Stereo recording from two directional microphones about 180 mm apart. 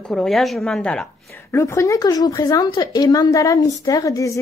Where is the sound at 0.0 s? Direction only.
5° left (ahead or behind).